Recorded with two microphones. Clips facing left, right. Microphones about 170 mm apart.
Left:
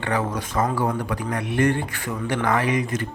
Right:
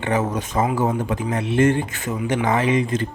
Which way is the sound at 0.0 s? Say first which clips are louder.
Right 3 dB; 20° right (ahead or behind).